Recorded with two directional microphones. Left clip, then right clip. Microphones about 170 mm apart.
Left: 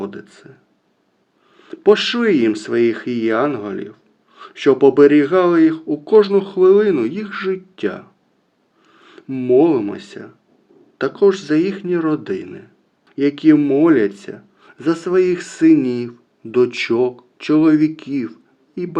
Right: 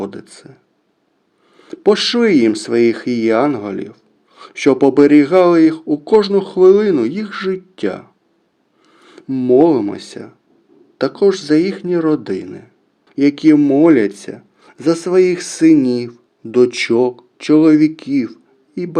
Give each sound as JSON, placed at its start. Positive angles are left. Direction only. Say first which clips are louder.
{"t": 0.0, "sound": "speech", "louder": "right 2 dB", "side_deg": -45}
{"t": 1.5, "sound": "speech", "louder": "even", "side_deg": -40}